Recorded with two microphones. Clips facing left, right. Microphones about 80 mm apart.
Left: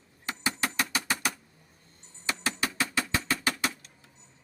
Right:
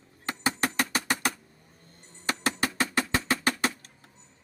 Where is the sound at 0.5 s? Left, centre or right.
Right.